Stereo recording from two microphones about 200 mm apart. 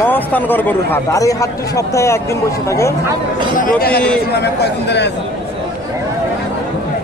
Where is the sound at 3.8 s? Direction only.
50° left (ahead or behind).